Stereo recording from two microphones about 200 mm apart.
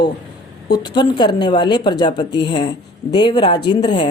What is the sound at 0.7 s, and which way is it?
A woman's voice, 20° left (ahead or behind).